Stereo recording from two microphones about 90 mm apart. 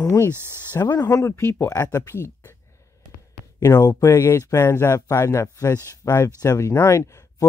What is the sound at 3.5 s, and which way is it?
Speech, 35° left (ahead or behind).